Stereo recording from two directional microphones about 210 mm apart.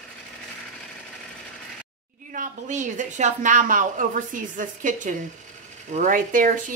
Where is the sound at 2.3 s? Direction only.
35° right (ahead or behind).